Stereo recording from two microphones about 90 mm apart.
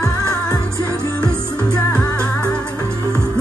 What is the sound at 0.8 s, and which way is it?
Music, 10° left (ahead or behind).